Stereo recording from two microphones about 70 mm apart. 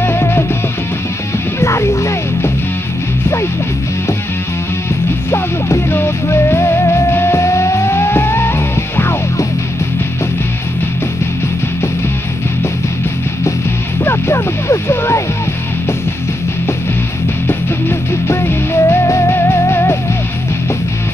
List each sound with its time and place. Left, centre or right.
0.0 s music: left
1.6 s music: left
5.3 s music: left
14.0 s music: left
17.5 s music: left